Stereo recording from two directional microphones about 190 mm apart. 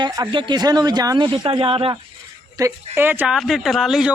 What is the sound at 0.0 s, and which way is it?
Speech, 25° right (ahead or behind).